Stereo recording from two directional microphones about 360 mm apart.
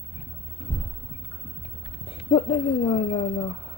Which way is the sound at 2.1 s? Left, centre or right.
Centre.